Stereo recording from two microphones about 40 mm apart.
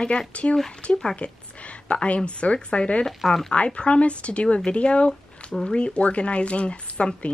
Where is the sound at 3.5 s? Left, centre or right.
Left.